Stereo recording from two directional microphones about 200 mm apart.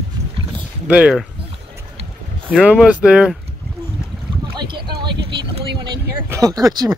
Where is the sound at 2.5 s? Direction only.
Centre (ahead or behind).